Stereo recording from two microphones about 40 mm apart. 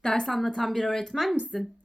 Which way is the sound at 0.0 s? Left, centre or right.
Centre.